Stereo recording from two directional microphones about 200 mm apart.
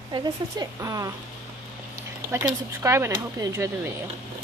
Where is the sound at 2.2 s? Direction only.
15° right (ahead or behind).